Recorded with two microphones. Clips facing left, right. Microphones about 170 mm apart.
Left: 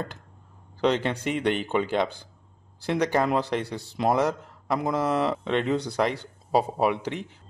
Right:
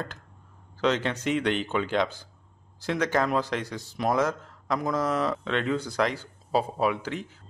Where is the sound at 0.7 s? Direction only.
15° left (ahead or behind).